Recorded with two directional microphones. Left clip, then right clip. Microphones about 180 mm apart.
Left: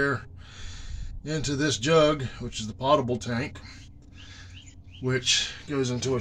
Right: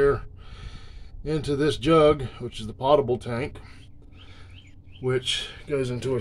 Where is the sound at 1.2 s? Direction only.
25° right (ahead or behind).